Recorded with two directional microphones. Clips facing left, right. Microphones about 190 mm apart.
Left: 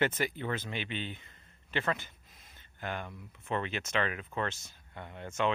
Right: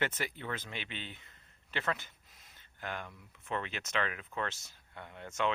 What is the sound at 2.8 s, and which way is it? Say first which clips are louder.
Speech: left 3 dB; 20° left (ahead or behind).